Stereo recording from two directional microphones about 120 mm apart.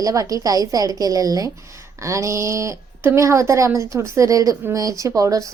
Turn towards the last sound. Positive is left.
turn(degrees=-30)  # may be behind; listen again after turning